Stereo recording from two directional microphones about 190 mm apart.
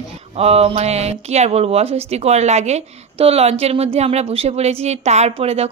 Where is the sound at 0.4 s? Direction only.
30° right (ahead or behind).